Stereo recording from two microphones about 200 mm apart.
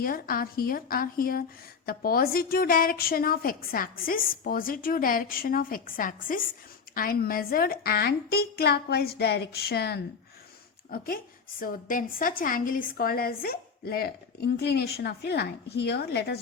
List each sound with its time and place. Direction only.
0.0 s a woman's voice: 45° left (ahead or behind)